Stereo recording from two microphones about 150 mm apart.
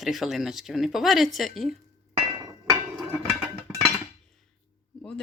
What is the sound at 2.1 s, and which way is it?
Hammer, 30° right (ahead or behind).